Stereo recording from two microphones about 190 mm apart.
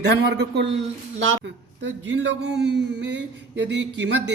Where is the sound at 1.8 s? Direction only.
70° right (ahead or behind).